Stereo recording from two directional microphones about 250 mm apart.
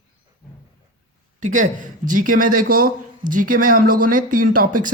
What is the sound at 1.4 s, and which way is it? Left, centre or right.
Speech, right.